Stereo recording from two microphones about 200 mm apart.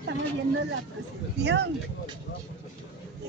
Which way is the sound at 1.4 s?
60° right (ahead or behind).